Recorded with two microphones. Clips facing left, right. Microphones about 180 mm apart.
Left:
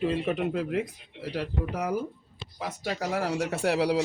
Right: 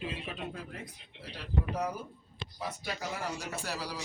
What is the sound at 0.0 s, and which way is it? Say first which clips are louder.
Speech: left 12 dB; 70° left (ahead or behind).